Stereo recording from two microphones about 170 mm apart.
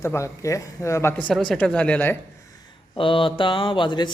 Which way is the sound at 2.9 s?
30° left (ahead or behind).